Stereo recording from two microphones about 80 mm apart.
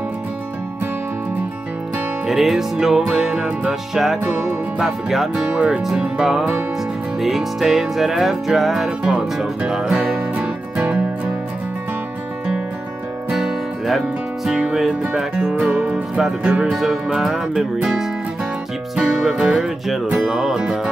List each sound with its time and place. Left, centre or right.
2.2 s music: centre
4.3 s speech: centre
7.2 s music: centre
13.3 s music: centre
14.7 s speech: centre